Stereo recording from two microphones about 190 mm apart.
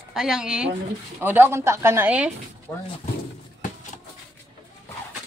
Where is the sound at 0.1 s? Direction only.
Centre (ahead or behind).